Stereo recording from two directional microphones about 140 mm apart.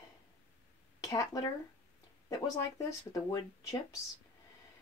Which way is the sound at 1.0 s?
25° left (ahead or behind).